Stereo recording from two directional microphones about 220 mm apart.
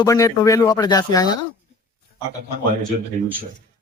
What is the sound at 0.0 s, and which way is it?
Speech, 15° left (ahead or behind).